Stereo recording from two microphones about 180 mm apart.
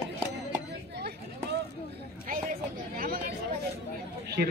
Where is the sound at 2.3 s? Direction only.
50° right (ahead or behind).